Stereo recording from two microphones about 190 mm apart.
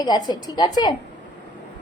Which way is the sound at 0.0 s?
20° left (ahead or behind).